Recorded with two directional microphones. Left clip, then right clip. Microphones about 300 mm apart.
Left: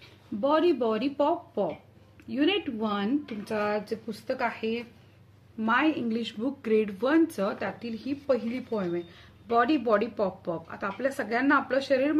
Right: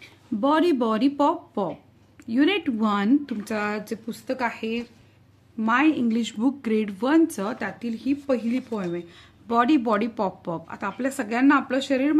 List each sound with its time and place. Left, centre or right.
0.4 s speech: right